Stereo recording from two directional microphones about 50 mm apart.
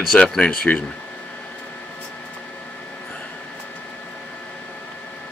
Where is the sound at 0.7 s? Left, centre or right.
Left.